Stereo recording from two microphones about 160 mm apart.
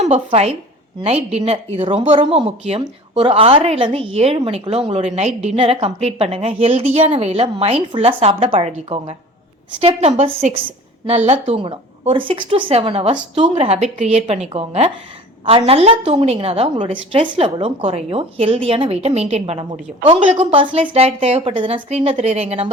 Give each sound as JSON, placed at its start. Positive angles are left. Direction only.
{"t": 0.0, "sound": "a woman's voice", "side_deg": -40}